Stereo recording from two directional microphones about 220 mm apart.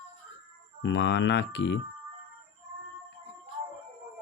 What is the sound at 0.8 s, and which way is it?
Speech, 55° left (ahead or behind).